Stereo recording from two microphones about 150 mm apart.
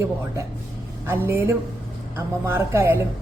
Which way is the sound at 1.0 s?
15° right (ahead or behind).